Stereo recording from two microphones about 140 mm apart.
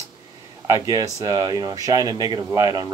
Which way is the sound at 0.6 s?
25° right (ahead or behind).